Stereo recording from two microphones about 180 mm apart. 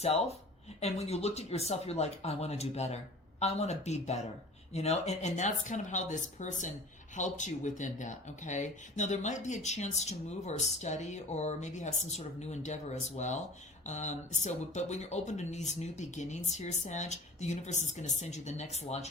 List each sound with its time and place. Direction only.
0.0 s speech: 35° left (ahead or behind)